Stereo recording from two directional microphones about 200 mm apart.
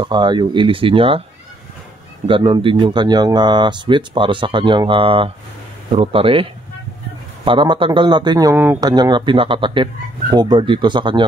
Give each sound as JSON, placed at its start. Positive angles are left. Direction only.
{"t": 0.0, "sound": "speech", "side_deg": -20}
{"t": 2.2, "sound": "speech", "side_deg": -25}
{"t": 7.4, "sound": "speech", "side_deg": -25}